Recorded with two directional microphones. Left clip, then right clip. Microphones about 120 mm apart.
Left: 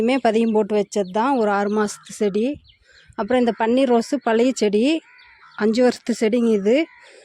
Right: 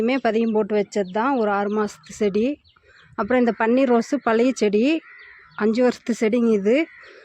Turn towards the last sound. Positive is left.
turn(degrees=15)  # may be behind; listen again after turning